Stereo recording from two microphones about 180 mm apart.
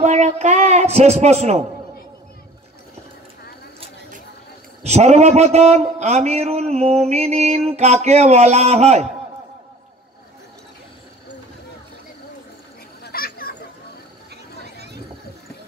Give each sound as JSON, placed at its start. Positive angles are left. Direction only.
{"t": 0.0, "sound": "a man's voice", "side_deg": -40}
{"t": 4.8, "sound": "a man's voice", "side_deg": -35}
{"t": 13.0, "sound": "children playing", "side_deg": 55}
{"t": 14.6, "sound": "a sound", "side_deg": -65}